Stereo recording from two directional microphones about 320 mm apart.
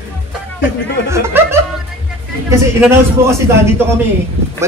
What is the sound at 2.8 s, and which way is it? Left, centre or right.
Speech, centre.